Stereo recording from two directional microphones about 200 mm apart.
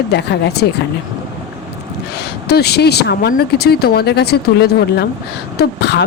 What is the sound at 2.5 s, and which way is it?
Speech, 55° left (ahead or behind).